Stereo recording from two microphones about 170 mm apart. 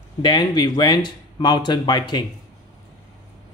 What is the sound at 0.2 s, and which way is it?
Speech, 25° left (ahead or behind).